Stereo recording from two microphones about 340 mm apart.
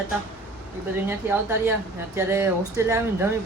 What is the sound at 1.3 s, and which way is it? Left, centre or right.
Speech, centre.